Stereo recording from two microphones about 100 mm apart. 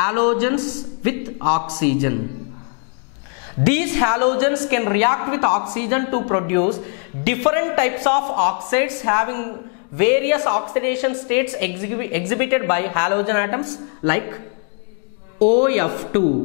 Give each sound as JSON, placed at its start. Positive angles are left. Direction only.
{"t": 0.0, "sound": "a woman's voice", "side_deg": 10}
{"t": 3.6, "sound": "a woman's voice", "side_deg": 10}
{"t": 15.3, "sound": "a woman's voice", "side_deg": 10}